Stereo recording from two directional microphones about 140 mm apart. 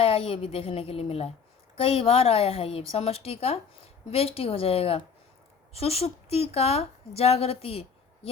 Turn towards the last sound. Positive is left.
turn(degrees=45)  # may be behind; listen again after turning